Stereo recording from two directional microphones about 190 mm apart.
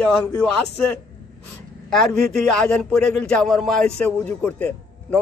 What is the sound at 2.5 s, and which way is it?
A man's voice, 5° left (ahead or behind).